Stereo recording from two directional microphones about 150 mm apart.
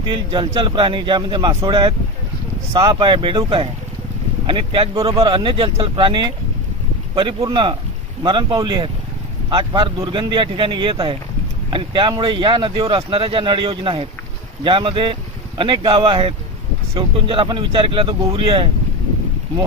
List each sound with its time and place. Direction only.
0.0 s speech: 35° right (ahead or behind)